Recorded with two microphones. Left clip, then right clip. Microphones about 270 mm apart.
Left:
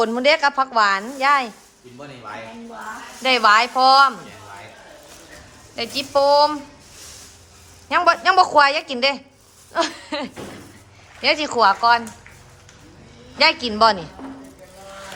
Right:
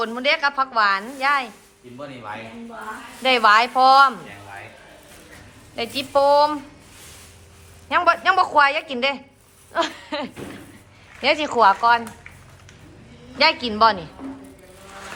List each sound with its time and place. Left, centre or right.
0.0 s a woman's voice: centre
3.2 s a woman's voice: centre
5.7 s a woman's voice: centre
7.9 s a woman's voice: centre
13.4 s a woman's voice: centre